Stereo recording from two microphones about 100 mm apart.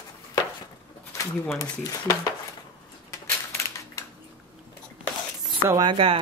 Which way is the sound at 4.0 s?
30° left (ahead or behind).